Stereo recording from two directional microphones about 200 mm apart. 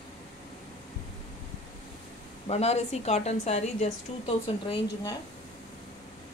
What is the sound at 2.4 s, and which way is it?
Speech, 30° left (ahead or behind).